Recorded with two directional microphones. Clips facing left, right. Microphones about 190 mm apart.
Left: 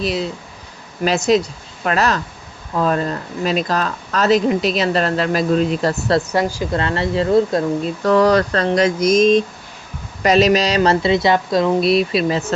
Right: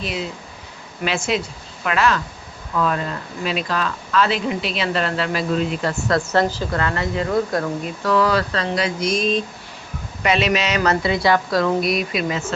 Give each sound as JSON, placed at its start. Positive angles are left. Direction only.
{"t": 0.0, "sound": "speech", "side_deg": 35}
{"t": 6.3, "sound": "speech", "side_deg": 10}
{"t": 6.7, "sound": "speech", "side_deg": 25}
{"t": 8.0, "sound": "speech", "side_deg": 40}